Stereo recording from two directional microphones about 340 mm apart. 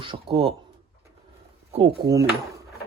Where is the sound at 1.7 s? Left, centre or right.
Centre.